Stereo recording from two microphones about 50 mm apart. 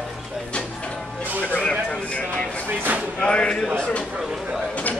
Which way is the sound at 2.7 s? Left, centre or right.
Right.